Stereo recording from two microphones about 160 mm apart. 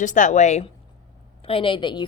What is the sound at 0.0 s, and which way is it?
Speech, 50° left (ahead or behind).